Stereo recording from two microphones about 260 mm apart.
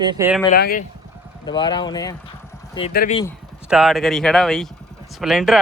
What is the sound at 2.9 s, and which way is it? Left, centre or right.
Speech, left.